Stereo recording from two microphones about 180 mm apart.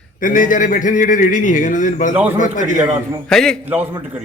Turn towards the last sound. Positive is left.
turn(degrees=5)  # may be behind; listen again after turning